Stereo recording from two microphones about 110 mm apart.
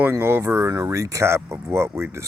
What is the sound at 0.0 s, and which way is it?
Speech, 20° right (ahead or behind).